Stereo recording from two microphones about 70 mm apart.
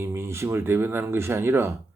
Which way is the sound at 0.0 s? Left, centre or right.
Right.